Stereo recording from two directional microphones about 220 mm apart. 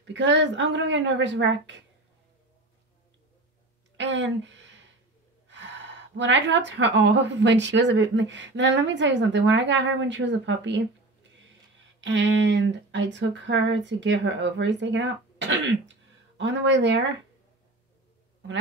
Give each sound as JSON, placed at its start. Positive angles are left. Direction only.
{"t": 0.0, "sound": "a woman's voice", "side_deg": -55}
{"t": 3.9, "sound": "a sound", "side_deg": -55}
{"t": 5.5, "sound": "a woman's voice", "side_deg": -55}
{"t": 12.0, "sound": "a woman's voice", "side_deg": -55}